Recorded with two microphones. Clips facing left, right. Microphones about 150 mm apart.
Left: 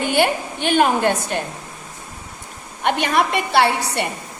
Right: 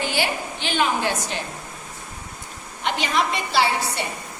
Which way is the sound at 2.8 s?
55° left (ahead or behind).